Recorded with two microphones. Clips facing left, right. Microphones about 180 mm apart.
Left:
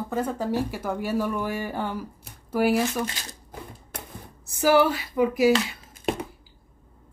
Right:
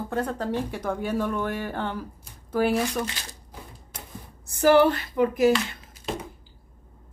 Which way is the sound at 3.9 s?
60° left (ahead or behind).